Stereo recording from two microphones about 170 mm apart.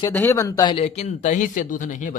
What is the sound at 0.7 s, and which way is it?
Speech, 40° left (ahead or behind).